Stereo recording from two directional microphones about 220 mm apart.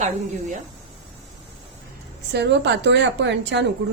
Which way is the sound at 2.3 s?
50° right (ahead or behind).